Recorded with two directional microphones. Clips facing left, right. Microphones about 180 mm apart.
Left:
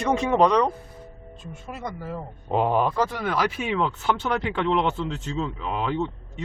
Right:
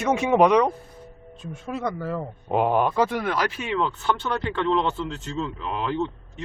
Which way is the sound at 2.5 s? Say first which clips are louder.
Right 1 dB; 5° right (ahead or behind).